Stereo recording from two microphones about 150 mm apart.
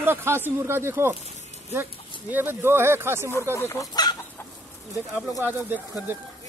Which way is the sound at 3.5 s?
20° left (ahead or behind).